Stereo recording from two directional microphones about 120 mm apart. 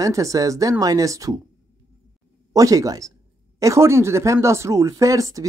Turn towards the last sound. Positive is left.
turn(degrees=-30)  # may be behind; listen again after turning